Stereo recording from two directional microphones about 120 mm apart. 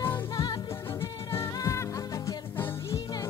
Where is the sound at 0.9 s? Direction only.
20° left (ahead or behind).